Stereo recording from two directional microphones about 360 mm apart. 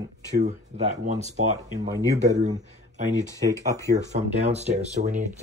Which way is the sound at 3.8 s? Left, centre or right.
Centre.